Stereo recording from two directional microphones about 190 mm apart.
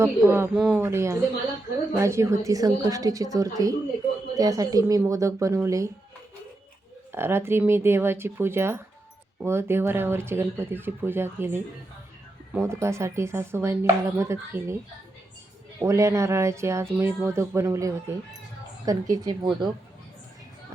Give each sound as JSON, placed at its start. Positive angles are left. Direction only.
{"t": 0.0, "sound": "speech", "side_deg": -10}
{"t": 7.1, "sound": "speech", "side_deg": -10}
{"t": 15.8, "sound": "speech", "side_deg": -15}